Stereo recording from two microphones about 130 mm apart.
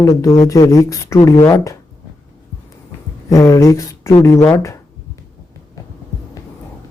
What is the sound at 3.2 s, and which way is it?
Speech, 25° left (ahead or behind).